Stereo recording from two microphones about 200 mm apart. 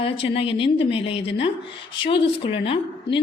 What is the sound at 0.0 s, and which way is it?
A woman's voice, 30° left (ahead or behind).